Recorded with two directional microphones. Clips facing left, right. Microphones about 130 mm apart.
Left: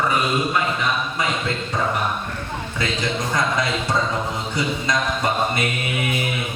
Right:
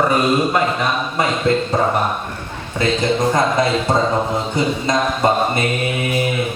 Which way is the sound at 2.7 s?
35° right (ahead or behind).